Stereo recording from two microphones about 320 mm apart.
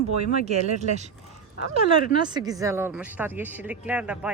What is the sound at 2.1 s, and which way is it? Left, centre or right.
Speech, centre.